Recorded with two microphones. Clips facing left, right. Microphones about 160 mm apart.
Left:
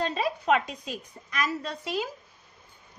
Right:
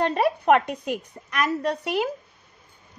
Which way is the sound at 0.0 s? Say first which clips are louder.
Right 6 dB; 60° right (ahead or behind).